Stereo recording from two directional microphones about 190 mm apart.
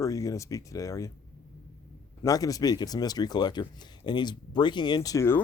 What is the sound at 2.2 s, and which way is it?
Speech, 20° left (ahead or behind).